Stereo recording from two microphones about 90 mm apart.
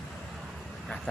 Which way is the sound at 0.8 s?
5° left (ahead or behind).